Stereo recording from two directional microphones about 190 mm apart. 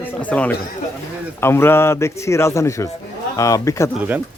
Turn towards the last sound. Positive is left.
turn(degrees=15)  # may be behind; listen again after turning